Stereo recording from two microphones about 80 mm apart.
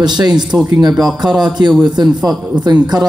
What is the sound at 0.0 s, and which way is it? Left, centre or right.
Speech, right.